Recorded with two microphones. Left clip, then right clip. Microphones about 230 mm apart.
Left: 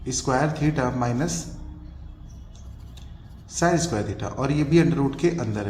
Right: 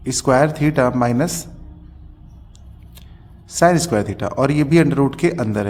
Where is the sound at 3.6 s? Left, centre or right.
Right.